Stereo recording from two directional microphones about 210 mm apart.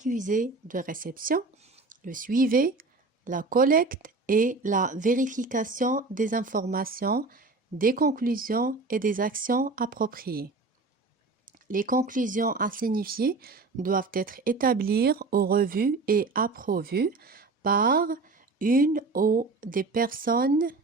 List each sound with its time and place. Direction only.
0.0 s speech: 40° right (ahead or behind)
11.7 s speech: 40° right (ahead or behind)